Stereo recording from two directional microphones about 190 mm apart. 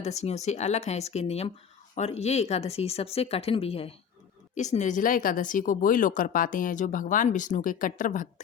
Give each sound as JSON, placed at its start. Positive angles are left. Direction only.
{"t": 0.0, "sound": "speech", "side_deg": 35}